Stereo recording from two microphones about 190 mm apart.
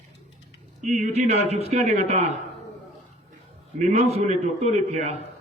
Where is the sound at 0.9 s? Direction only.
35° right (ahead or behind).